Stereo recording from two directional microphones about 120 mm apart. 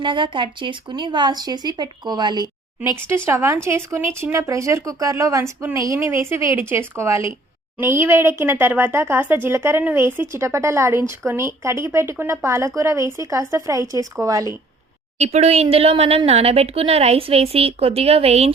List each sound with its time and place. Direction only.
0.0 s speech: 45° right (ahead or behind)
3.2 s speech: 25° right (ahead or behind)
15.2 s speech: 65° right (ahead or behind)